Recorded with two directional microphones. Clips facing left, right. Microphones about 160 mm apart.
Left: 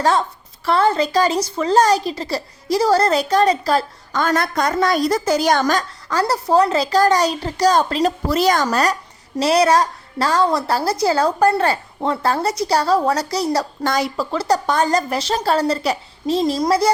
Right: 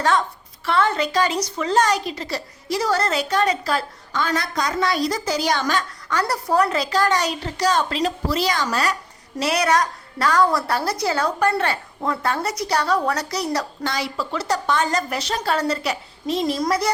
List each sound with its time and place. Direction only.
0.0 s a woman's voice: 35° left (ahead or behind)
6.9 s a woman's voice: 35° left (ahead or behind)
9.4 s a woman's voice: 30° left (ahead or behind)
13.8 s a woman's voice: 45° left (ahead or behind); by 16.9 s 30° left (ahead or behind)